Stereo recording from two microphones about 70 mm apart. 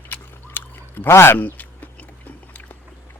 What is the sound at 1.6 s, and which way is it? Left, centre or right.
Biting, left.